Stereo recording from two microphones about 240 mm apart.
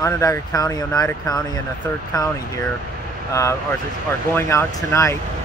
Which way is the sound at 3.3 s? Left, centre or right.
Centre.